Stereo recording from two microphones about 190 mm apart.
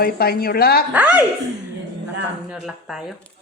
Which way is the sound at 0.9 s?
10° right (ahead or behind).